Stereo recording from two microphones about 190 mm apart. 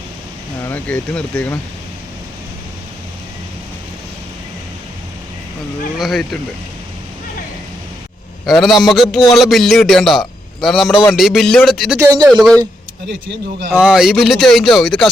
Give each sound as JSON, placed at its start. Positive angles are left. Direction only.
{"t": 0.6, "sound": "speech", "side_deg": 10}
{"t": 6.0, "sound": "a man's voice", "side_deg": 0}
{"t": 8.4, "sound": "a man's voice", "side_deg": 0}
{"t": 11.9, "sound": "speech", "side_deg": -20}
{"t": 12.3, "sound": "a man's voice", "side_deg": 5}
{"t": 13.7, "sound": "a man's voice", "side_deg": -5}